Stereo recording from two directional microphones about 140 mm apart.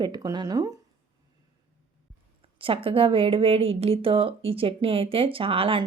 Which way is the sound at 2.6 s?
40° right (ahead or behind).